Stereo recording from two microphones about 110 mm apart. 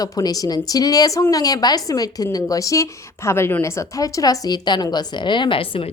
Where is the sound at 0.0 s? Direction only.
35° left (ahead or behind).